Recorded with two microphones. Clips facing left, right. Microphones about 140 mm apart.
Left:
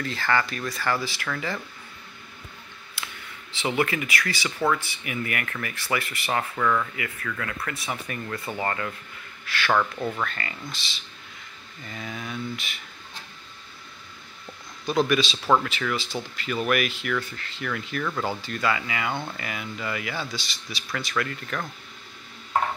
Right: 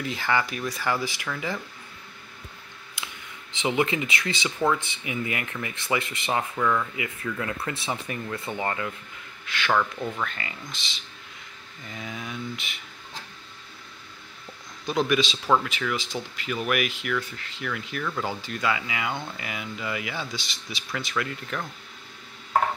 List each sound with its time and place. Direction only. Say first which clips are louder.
0.0 s speech: left 1 dB; 15° right (ahead or behind)
3.0 s a sound: left 1 dB; 20° right (ahead or behind)
3.5 s speech: right 1 dB; 20° right (ahead or behind)
6.5 s speech: left 2 dB; 5° right (ahead or behind)
7.0 s speech: right 2 dB; 25° right (ahead or behind)
9.7 s speech: left 1 dB; 5° left (ahead or behind)
10.2 s speech: left 2 dB; 15° right (ahead or behind)
14.9 s speech: left 1 dB; 15° right (ahead or behind)